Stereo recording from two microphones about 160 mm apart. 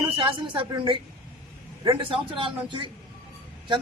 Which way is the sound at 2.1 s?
30° right (ahead or behind).